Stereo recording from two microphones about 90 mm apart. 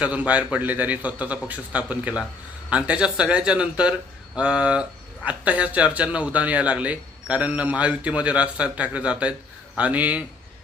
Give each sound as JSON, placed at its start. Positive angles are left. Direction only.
{"t": 0.0, "sound": "speech", "side_deg": -15}